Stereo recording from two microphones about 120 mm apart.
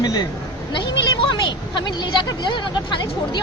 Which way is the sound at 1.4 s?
40° left (ahead or behind).